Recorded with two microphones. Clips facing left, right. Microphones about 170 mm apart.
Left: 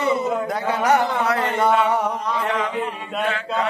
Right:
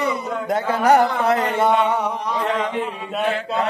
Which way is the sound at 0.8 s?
30° right (ahead or behind).